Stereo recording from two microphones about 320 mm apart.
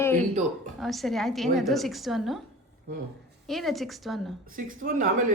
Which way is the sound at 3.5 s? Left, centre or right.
Centre.